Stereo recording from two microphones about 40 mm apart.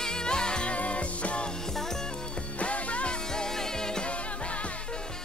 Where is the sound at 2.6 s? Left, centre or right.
Left.